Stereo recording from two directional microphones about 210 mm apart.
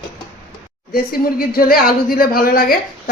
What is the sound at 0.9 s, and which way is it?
A woman's voice, 45° left (ahead or behind).